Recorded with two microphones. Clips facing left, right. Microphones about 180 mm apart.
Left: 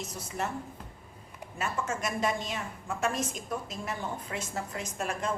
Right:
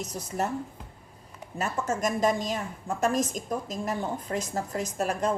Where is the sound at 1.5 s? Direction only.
40° right (ahead or behind).